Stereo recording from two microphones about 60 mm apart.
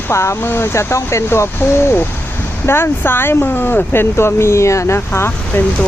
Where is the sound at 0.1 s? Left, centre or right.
Left.